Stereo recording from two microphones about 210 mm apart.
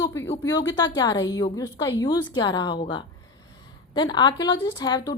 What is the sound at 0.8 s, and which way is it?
Speech, 20° left (ahead or behind).